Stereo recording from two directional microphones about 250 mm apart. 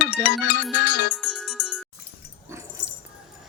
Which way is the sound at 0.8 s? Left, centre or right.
Left.